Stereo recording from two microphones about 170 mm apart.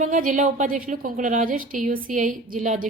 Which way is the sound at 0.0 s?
50° right (ahead or behind).